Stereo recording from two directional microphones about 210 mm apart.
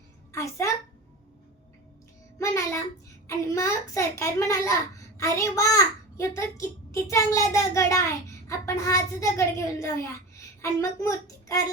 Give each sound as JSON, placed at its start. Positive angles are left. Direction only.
{"t": 0.3, "sound": "a child's voice", "side_deg": 15}
{"t": 2.4, "sound": "child singing", "side_deg": 15}
{"t": 3.2, "sound": "a child's voice", "side_deg": 15}